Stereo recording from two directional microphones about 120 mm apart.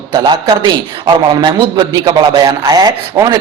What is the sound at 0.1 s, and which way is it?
A man's voice, 35° right (ahead or behind).